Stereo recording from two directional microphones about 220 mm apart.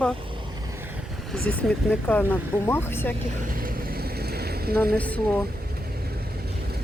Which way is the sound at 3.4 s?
40° right (ahead or behind).